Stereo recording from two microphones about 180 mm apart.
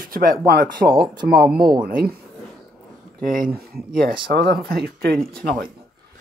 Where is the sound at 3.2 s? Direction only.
50° right (ahead or behind).